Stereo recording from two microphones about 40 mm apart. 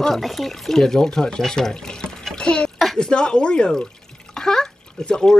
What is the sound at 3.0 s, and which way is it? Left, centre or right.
Speech, left.